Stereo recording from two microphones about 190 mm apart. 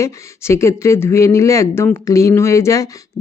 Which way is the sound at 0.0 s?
15° left (ahead or behind).